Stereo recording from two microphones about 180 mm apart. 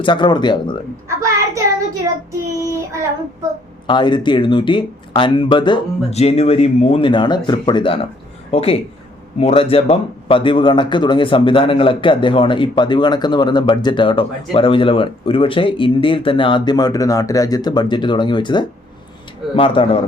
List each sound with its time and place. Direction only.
0.0 s a man's voice: 25° left (ahead or behind)
1.0 s a child's voice: 15° right (ahead or behind)
2.6 s child singing: 15° right (ahead or behind)
3.8 s a man's voice: 25° left (ahead or behind)